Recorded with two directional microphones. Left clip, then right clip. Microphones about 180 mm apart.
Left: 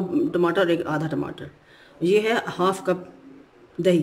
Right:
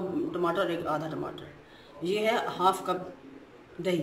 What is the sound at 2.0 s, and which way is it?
Speech, 60° left (ahead or behind).